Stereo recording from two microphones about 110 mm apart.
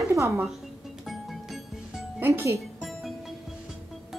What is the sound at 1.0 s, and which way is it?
Music, centre (ahead or behind).